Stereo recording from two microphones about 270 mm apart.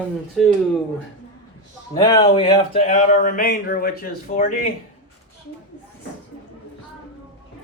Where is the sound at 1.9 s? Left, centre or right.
Centre; by 4.7 s left.